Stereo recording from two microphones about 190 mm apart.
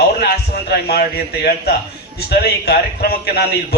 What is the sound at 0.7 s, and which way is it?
Speech, 55° left (ahead or behind).